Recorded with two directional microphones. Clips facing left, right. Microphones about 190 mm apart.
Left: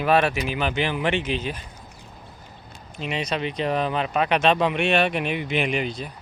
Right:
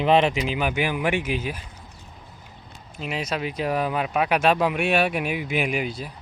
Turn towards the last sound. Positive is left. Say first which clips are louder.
# left 1 dB
turn(degrees=-5)  # may be behind; listen again after turning